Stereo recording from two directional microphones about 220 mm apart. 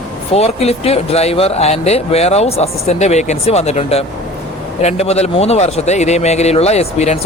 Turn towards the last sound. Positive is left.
turn(degrees=30)  # may be behind; listen again after turning